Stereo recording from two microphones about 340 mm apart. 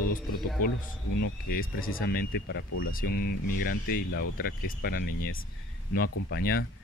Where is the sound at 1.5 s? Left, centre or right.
Left.